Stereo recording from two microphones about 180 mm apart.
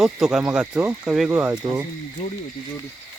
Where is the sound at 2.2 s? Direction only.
35° left (ahead or behind).